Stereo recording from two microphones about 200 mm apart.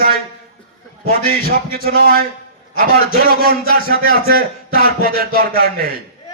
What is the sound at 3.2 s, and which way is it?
A man's voice, 50° right (ahead or behind).